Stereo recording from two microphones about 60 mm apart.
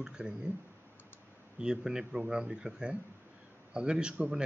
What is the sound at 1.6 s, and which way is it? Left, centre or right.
Speech, centre.